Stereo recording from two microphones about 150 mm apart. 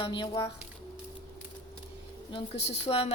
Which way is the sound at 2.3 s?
45° left (ahead or behind).